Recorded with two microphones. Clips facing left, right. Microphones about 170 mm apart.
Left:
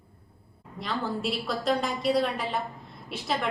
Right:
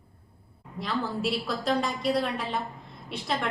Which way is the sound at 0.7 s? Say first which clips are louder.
Right 1 dB; centre (ahead or behind).